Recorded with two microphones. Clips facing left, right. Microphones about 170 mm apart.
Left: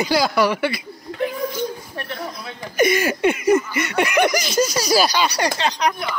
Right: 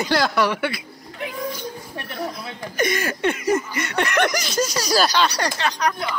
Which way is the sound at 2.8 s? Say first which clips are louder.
Left 5 dB; 10° left (ahead or behind).